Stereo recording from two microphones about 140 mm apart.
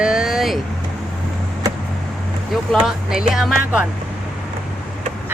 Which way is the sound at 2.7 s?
5° right (ahead or behind).